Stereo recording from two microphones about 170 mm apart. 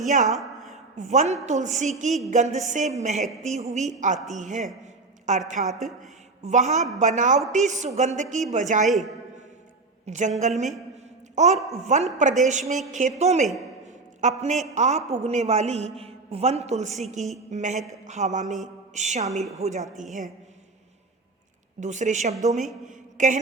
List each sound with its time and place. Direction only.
0.1 s a woman's voice: 45° right (ahead or behind)
0.3 s a sound: centre (ahead or behind)
0.9 s a woman's voice: 45° right (ahead or behind)
10.1 s a woman's voice: 45° right (ahead or behind)
10.9 s a sound: 40° right (ahead or behind)
11.8 s a woman's voice: 40° right (ahead or behind)
13.8 s a sound: 45° right (ahead or behind)
14.8 s a man's voice: 40° right (ahead or behind)
18.6 s mantra: 45° right (ahead or behind)
19.5 s a man's voice: 40° right (ahead or behind)
21.8 s a woman's voice: 45° right (ahead or behind)
22.9 s a sound: 50° right (ahead or behind)